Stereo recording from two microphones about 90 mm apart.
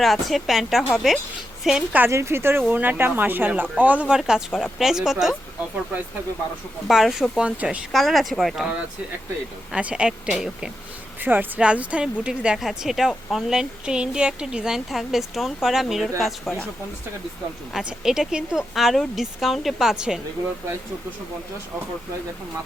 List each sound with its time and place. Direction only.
0.0 s speech: centre (ahead or behind)
2.0 s speech: 30° right (ahead or behind); by 5.4 s 5° right (ahead or behind)
6.8 s speech: centre (ahead or behind)
7.9 s speech: centre (ahead or behind)
9.7 s speech: 10° right (ahead or behind)
11.2 s speech: 20° right (ahead or behind); by 16.3 s centre (ahead or behind)
17.7 s speech: 5° right (ahead or behind)